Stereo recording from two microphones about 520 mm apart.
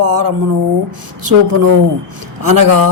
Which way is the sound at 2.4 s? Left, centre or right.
Right.